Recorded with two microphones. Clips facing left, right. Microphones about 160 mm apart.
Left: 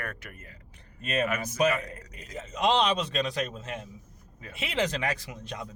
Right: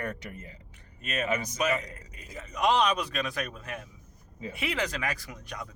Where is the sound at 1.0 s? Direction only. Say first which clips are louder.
Left 2 dB; 30° left (ahead or behind).